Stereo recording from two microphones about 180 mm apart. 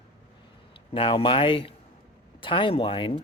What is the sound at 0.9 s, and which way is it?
Speech, 30° left (ahead or behind).